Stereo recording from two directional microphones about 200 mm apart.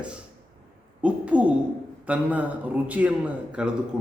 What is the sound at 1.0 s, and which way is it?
A man's voice, 5° right (ahead or behind).